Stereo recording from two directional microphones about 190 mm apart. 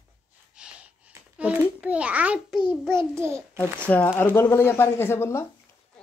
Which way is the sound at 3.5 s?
5° left (ahead or behind).